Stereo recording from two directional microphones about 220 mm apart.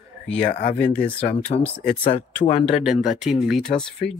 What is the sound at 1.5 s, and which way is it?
Speech, 30° left (ahead or behind).